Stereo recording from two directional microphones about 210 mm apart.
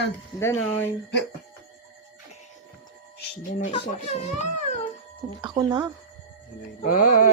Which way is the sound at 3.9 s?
35° left (ahead or behind).